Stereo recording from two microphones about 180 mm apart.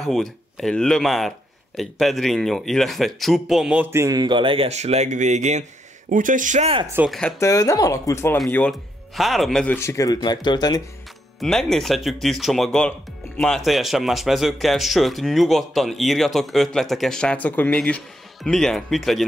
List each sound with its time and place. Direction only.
0.0 s speech: centre (ahead or behind); by 6.9 s 35° right (ahead or behind)
7.1 s speech: 5° left (ahead or behind)
7.3 s speech: 20° left (ahead or behind); by 9.8 s centre (ahead or behind)
9.8 s speech: 15° left (ahead or behind)
11.3 s speech: centre (ahead or behind)